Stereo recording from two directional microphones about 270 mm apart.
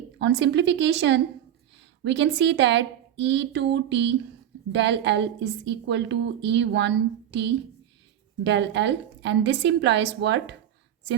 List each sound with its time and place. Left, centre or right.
0.2 s a woman's voice: right